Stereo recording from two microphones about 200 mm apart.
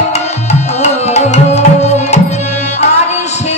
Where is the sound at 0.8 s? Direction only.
35° left (ahead or behind).